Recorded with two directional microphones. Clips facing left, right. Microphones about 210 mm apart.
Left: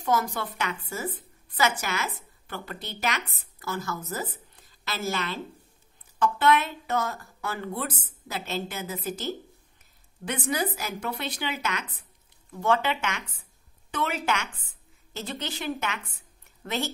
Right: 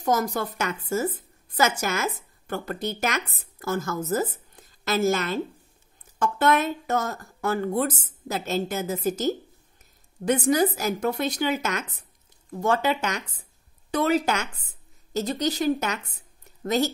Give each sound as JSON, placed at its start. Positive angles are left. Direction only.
{"t": 0.0, "sound": "a woman's voice", "side_deg": -40}